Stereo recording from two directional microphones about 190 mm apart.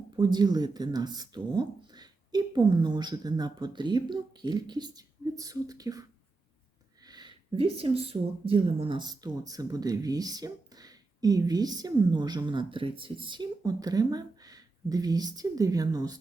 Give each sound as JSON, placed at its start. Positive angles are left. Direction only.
{"t": 0.2, "sound": "speech", "side_deg": -20}